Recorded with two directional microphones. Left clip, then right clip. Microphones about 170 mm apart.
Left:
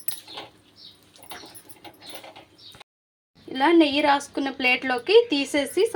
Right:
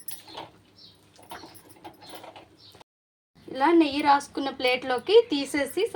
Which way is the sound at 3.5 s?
20° left (ahead or behind).